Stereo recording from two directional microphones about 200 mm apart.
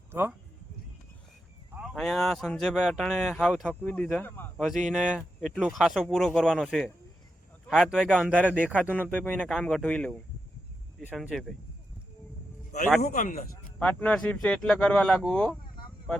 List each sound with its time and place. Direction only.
0.1 s speech: 10° right (ahead or behind)
1.7 s speech: centre (ahead or behind)
4.5 s speech: centre (ahead or behind)
8.7 s speech: 5° right (ahead or behind)
9.1 s speech: 5° left (ahead or behind)
13.0 s speech: 40° left (ahead or behind)
13.7 s speech: 5° left (ahead or behind)